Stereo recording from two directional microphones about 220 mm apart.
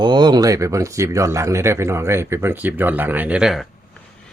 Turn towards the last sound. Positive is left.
turn(degrees=0)  # may be behind; listen again after turning